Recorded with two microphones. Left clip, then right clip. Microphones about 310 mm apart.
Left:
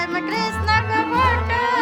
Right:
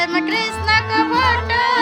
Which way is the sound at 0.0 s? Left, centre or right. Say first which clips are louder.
Right 4 dB; centre.